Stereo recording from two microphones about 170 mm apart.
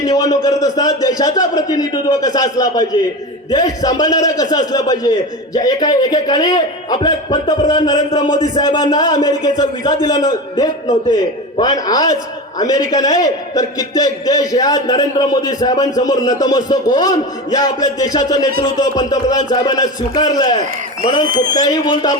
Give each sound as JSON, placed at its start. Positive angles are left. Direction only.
{"t": 0.0, "sound": "a man's voice", "side_deg": 20}